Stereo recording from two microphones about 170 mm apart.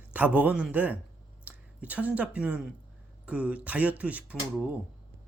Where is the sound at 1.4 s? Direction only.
10° right (ahead or behind).